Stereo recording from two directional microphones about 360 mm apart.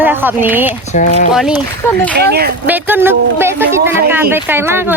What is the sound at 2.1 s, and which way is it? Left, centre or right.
Speech, right.